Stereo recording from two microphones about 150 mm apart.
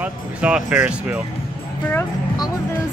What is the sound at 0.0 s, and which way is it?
Speech, 5° right (ahead or behind).